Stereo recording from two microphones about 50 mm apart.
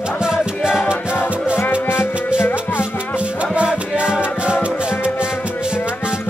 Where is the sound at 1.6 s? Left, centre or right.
Left.